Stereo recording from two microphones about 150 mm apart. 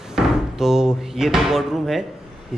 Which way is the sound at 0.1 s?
5° right (ahead or behind).